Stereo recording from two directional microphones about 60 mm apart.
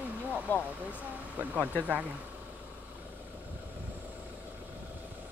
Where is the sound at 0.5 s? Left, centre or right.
Left.